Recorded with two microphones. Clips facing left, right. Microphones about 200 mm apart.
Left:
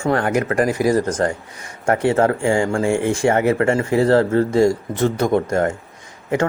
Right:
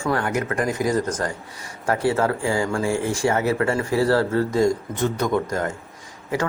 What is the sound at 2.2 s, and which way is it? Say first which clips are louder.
Speech: left 5 dB; 25° left (ahead or behind).